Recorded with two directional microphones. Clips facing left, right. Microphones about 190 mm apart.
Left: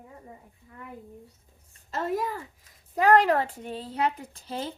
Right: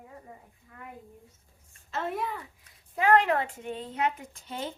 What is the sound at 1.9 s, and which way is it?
A woman's voice, 40° left (ahead or behind).